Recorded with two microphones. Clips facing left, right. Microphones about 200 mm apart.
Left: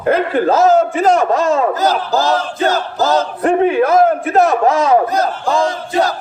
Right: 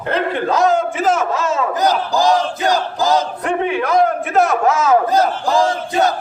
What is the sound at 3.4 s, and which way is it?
Speech, 40° left (ahead or behind).